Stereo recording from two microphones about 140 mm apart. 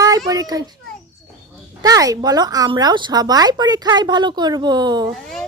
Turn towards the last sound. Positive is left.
turn(degrees=5)  # may be behind; listen again after turning